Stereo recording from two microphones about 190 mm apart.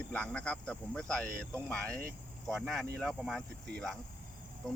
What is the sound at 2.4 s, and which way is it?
Speech, centre (ahead or behind).